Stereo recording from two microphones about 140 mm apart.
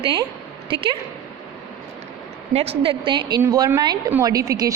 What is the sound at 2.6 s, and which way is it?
Speech, 45° right (ahead or behind).